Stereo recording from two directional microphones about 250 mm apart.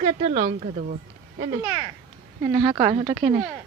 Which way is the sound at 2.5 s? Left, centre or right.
Centre.